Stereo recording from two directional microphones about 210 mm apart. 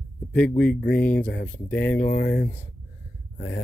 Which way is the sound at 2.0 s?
50° left (ahead or behind).